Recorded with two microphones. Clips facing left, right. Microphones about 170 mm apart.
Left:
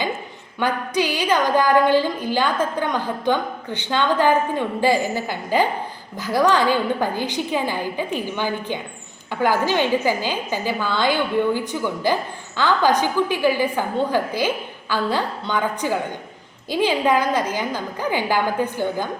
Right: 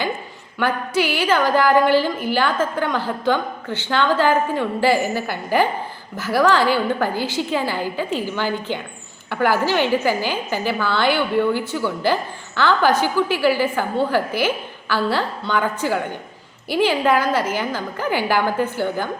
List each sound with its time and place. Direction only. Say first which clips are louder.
0.6 s a woman's voice: right 1 dB; 15° left (ahead or behind)